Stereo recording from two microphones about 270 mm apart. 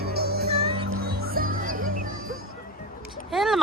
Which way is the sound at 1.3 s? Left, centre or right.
Right.